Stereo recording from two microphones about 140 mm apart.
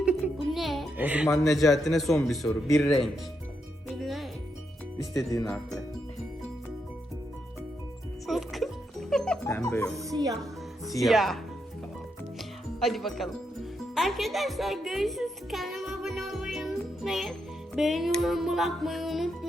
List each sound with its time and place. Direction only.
0.0 s music: 5° right (ahead or behind)
0.9 s speech: 10° right (ahead or behind)
1.5 s music: centre (ahead or behind)
3.9 s music: centre (ahead or behind)
4.9 s speech: 25° left (ahead or behind)
8.3 s music: centre (ahead or behind)
9.5 s speech: 20° left (ahead or behind)
9.9 s speech: 25° right (ahead or behind)
11.0 s music: centre (ahead or behind)
12.8 s music: centre (ahead or behind)